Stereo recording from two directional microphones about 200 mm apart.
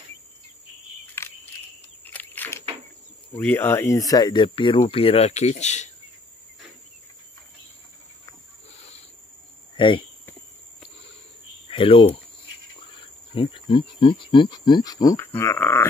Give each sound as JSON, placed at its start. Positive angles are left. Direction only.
{"t": 1.2, "sound": "a sound", "side_deg": 15}
{"t": 3.3, "sound": "speech", "side_deg": 10}
{"t": 8.7, "sound": "cricket", "side_deg": 30}
{"t": 9.8, "sound": "speech", "side_deg": 25}
{"t": 11.7, "sound": "speech", "side_deg": 25}